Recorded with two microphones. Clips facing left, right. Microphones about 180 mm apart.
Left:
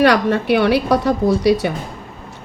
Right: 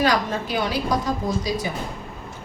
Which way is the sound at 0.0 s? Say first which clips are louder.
Left 8 dB; 65° left (ahead or behind).